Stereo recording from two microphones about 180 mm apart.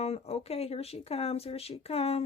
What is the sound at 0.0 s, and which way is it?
Speech, 35° left (ahead or behind).